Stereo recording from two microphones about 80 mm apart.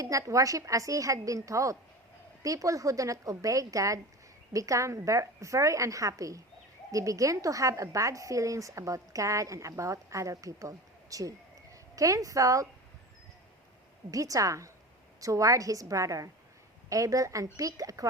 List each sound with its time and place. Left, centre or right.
0.0 s a woman's voice: right
14.1 s a woman's voice: right